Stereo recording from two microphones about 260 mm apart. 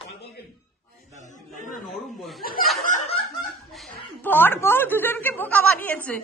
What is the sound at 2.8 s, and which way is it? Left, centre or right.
Snicker, left.